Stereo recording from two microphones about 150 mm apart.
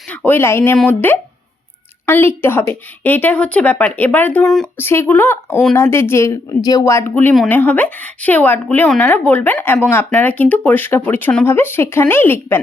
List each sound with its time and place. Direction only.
0.1 s speech: 10° left (ahead or behind)
4.8 s speech: 15° left (ahead or behind)